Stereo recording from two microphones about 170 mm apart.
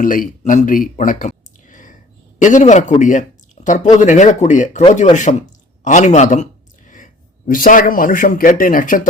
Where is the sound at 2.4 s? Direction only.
45° left (ahead or behind).